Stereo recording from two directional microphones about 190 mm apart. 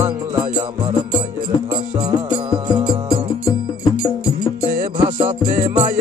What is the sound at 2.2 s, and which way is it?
Music, 25° right (ahead or behind).